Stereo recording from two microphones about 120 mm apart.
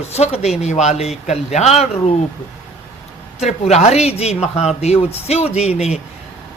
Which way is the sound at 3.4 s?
65° left (ahead or behind).